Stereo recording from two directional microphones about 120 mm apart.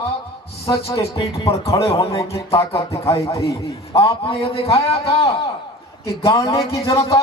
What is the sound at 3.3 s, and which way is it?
Speech, 25° left (ahead or behind).